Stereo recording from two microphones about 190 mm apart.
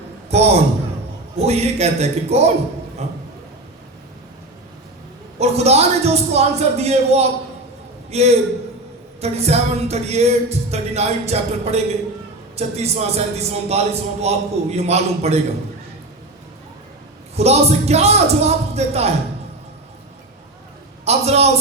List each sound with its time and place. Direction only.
0.3 s a man's voice: 35° right (ahead or behind)
5.4 s a man's voice: 35° right (ahead or behind)
17.3 s a man's voice: 35° right (ahead or behind)
21.0 s a man's voice: 35° right (ahead or behind)